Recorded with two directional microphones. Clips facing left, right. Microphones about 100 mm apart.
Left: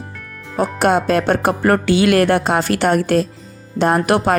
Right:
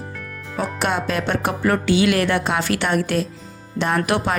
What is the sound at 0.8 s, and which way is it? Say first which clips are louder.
Speech: left 8 dB; 40° left (ahead or behind).